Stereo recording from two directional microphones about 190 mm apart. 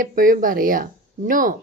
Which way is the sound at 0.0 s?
45° right (ahead or behind).